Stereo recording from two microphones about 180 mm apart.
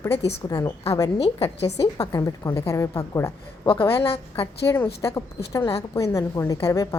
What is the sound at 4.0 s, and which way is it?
Speech, 30° left (ahead or behind).